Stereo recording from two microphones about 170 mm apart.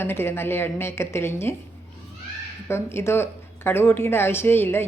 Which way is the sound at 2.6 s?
15° left (ahead or behind).